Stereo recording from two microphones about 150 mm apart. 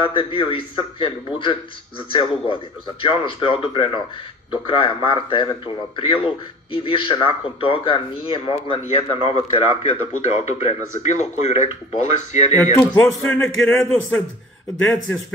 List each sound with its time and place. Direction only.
0.0 s a man's voice: 35° left (ahead or behind)
12.9 s speech: 10° left (ahead or behind)